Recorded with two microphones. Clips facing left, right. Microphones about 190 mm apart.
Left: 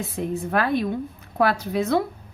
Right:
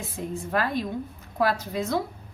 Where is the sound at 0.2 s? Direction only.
60° left (ahead or behind).